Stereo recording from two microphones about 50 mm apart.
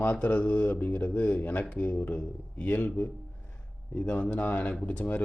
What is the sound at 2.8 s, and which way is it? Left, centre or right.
Speech, left.